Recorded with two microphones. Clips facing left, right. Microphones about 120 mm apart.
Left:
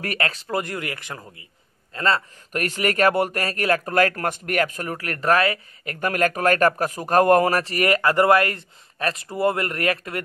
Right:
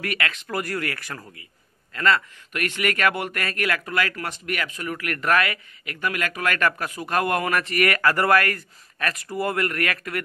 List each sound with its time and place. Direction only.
0.0 s a man's voice: 35° left (ahead or behind)
4.9 s speech: 30° left (ahead or behind)
5.9 s a man's voice: 45° left (ahead or behind); by 10.2 s 25° left (ahead or behind)